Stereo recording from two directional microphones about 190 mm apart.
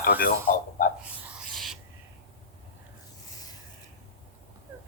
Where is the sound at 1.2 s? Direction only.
Centre (ahead or behind).